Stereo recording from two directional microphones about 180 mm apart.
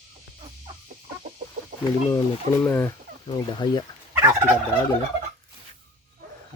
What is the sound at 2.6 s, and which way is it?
Speech, 15° left (ahead or behind).